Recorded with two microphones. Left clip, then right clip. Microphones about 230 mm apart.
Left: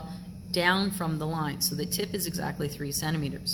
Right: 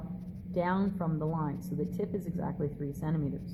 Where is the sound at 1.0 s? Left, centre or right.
Left.